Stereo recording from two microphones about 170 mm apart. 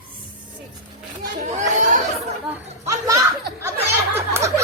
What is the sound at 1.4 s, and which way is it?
Chatter, 45° right (ahead or behind).